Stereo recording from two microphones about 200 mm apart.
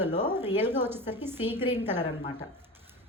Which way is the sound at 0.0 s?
10° right (ahead or behind).